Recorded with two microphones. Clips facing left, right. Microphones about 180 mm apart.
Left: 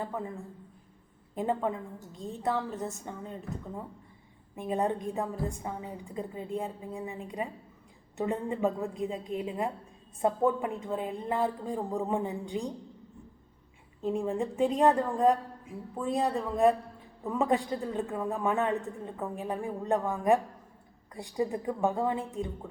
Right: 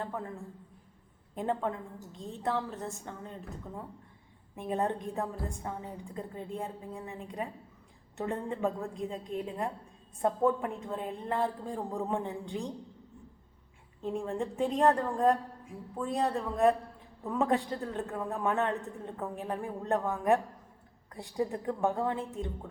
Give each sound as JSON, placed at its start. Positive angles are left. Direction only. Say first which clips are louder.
{"t": 0.0, "sound": "a man's voice", "louder": "left 2 dB", "side_deg": 5}
{"t": 1.4, "sound": "a man's voice", "louder": "left 2 dB", "side_deg": 5}
{"t": 4.5, "sound": "a man's voice", "louder": "left 2 dB", "side_deg": 0}
{"t": 14.0, "sound": "a man's voice", "louder": "left 3 dB", "side_deg": 0}